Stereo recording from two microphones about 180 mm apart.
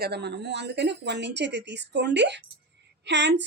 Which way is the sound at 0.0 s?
65° right (ahead or behind).